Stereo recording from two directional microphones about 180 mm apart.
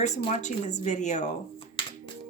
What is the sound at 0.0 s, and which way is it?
Speech, 40° left (ahead or behind).